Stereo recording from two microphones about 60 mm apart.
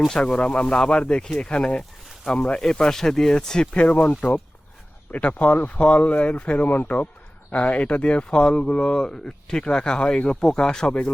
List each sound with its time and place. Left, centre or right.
0.1 s speech: centre
3.8 s speech: left